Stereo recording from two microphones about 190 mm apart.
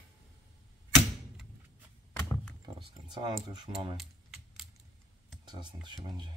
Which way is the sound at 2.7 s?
25° right (ahead or behind).